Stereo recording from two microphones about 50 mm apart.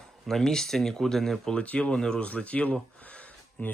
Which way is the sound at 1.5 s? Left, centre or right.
Left.